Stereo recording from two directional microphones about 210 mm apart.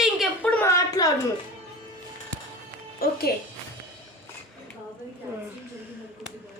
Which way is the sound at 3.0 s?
45° left (ahead or behind).